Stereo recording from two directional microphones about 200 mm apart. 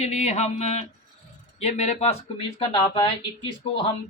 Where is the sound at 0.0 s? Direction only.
35° left (ahead or behind).